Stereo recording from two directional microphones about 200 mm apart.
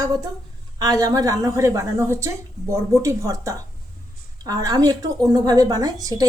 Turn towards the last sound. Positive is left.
turn(degrees=-20)  # may be behind; listen again after turning